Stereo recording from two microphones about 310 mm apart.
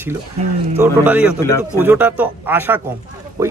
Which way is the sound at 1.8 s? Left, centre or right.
Centre.